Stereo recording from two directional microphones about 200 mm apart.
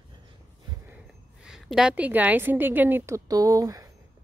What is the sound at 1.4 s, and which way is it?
A woman's voice, centre (ahead or behind).